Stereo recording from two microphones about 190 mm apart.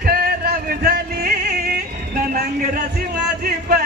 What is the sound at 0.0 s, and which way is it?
Music, 50° right (ahead or behind).